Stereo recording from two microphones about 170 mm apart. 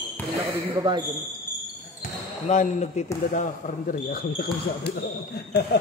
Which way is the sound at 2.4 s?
45° left (ahead or behind).